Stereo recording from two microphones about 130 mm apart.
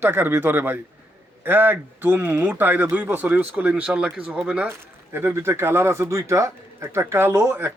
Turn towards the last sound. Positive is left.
turn(degrees=-15)  # may be behind; listen again after turning